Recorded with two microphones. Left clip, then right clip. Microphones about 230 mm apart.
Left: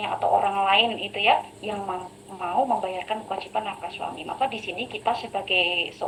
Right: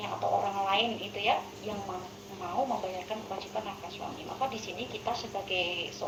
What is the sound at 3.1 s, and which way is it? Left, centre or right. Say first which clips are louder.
Speech: left 8 dB; left.